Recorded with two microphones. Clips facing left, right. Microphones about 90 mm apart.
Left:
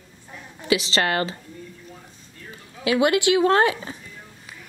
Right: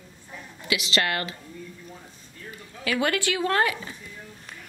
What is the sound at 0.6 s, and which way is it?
Speech, 30° left (ahead or behind).